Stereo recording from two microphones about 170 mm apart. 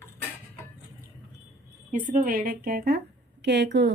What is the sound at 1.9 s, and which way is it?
Speech, 50° right (ahead or behind).